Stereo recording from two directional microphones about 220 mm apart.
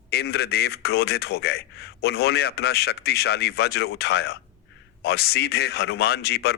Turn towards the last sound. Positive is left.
turn(degrees=45)  # may be behind; listen again after turning